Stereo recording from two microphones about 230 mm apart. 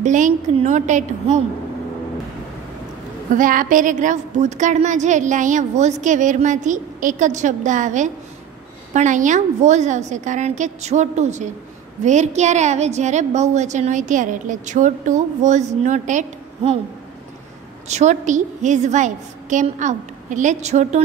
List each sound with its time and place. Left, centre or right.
0.0 s a woman's voice: right
3.3 s a woman's voice: right
17.8 s a woman's voice: right